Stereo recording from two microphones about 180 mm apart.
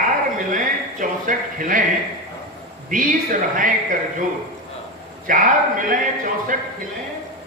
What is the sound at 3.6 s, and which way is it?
Speech, 45° right (ahead or behind).